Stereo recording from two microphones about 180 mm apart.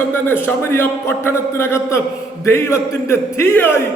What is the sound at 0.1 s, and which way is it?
A man's voice, 10° left (ahead or behind).